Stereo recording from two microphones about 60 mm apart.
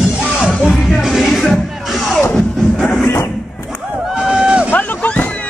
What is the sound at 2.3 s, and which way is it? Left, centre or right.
Music, centre.